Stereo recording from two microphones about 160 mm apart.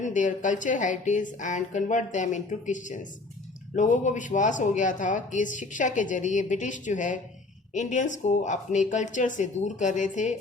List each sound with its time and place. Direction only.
0.0 s speech: 50° left (ahead or behind)